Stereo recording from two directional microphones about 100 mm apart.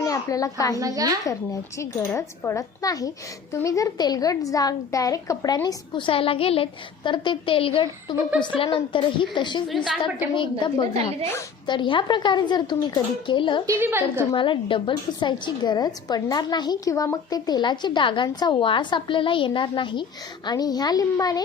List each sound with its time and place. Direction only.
0.0 s a child's voice: 35° left (ahead or behind)
0.8 s a woman's voice: 35° right (ahead or behind)
2.1 s a woman's voice: 30° left (ahead or behind)
5.6 s a woman's voice: 50° left (ahead or behind)
9.7 s a woman's voice: centre (ahead or behind)
10.3 s a woman's voice: 50° left (ahead or behind)
13.7 s a woman's voice: 25° right (ahead or behind)
14.3 s a woman's voice: 55° left (ahead or behind)
20.5 s a woman's voice: 40° left (ahead or behind)